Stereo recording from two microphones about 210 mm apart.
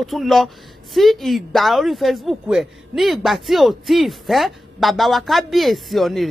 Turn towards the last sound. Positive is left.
turn(degrees=0)  # may be behind; listen again after turning